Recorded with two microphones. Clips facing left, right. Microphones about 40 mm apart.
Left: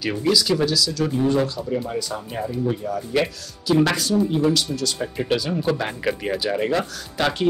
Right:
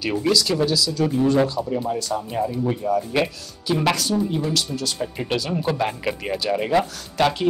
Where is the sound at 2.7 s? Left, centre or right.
Centre.